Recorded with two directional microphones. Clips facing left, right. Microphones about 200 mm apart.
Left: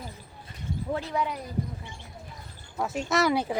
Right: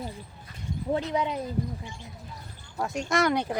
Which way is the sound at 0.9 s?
20° right (ahead or behind).